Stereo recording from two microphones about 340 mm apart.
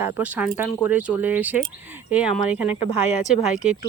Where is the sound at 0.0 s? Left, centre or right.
Centre.